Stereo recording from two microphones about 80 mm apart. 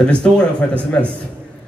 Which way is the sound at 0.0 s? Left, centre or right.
Centre.